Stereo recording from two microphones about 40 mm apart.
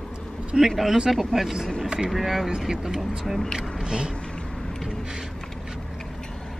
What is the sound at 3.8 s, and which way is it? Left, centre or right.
Speech, right.